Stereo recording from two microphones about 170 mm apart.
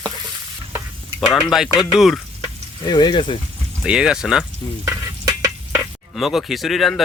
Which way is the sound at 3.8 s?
5° right (ahead or behind).